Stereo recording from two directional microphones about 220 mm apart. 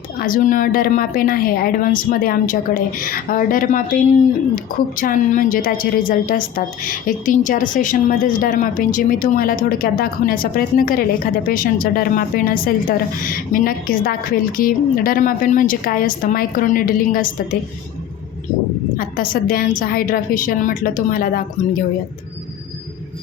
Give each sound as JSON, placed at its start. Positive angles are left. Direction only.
{"t": 0.2, "sound": "a woman's voice", "side_deg": 40}
{"t": 18.9, "sound": "a woman's voice", "side_deg": 40}